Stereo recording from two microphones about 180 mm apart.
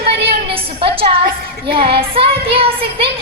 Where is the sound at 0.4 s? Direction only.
30° right (ahead or behind).